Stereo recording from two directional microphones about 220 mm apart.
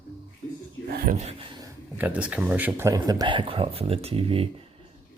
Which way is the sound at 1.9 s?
5° right (ahead or behind).